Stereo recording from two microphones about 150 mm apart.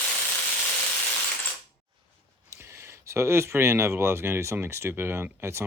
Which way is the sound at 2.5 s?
15° right (ahead or behind).